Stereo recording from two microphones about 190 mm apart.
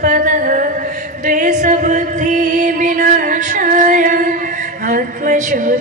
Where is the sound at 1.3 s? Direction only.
40° right (ahead or behind).